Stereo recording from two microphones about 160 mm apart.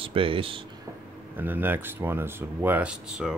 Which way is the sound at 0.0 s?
35° right (ahead or behind).